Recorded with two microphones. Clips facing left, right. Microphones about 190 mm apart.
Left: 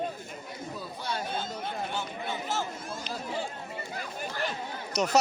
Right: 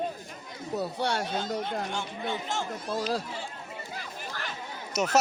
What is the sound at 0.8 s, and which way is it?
Speech, 75° right (ahead or behind).